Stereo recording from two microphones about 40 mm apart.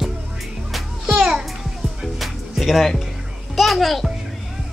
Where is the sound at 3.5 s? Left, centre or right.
Centre.